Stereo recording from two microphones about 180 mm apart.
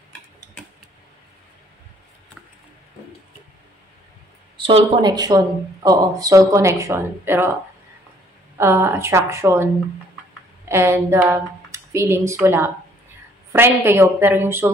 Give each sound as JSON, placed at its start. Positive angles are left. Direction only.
{"t": 4.6, "sound": "speech", "side_deg": -30}
{"t": 8.5, "sound": "a woman's voice", "side_deg": -15}